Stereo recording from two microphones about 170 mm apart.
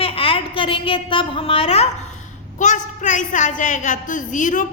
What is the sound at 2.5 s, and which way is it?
A woman's voice, 45° left (ahead or behind).